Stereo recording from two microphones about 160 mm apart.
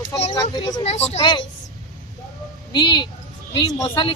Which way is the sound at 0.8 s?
40° left (ahead or behind).